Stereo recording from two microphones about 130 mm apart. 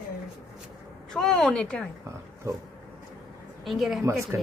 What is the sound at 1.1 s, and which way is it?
Speech, 5° left (ahead or behind).